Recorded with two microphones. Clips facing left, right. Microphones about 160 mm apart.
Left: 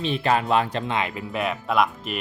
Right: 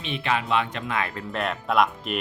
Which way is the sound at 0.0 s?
40° left (ahead or behind).